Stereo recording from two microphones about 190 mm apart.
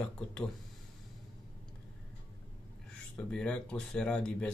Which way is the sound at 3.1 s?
5° left (ahead or behind).